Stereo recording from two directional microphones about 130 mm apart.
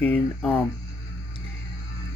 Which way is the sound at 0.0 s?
10° left (ahead or behind).